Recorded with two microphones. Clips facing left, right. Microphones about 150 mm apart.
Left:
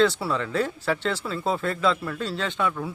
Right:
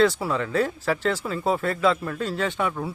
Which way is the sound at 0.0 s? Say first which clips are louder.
Right 1 dB; 10° right (ahead or behind).